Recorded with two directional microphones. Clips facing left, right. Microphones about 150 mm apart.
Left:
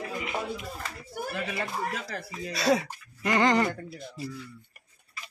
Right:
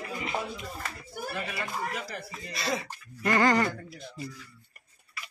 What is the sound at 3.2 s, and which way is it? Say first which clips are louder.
Speech: even; 20° left (ahead or behind).